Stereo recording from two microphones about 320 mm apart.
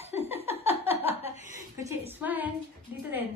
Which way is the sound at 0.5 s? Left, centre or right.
Centre.